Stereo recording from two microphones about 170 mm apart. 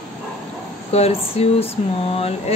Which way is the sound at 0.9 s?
40° left (ahead or behind).